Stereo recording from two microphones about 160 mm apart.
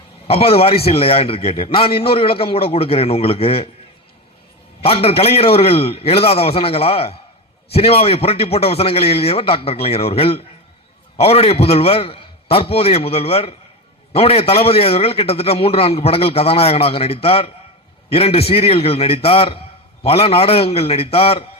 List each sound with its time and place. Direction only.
0.3 s a man's voice: 35° left (ahead or behind)
4.8 s a man's voice: 35° left (ahead or behind)